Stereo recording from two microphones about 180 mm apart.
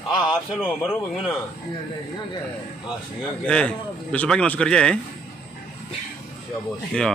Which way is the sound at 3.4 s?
5° left (ahead or behind).